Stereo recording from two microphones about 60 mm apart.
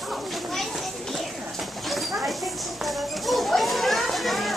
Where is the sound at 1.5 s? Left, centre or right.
Centre.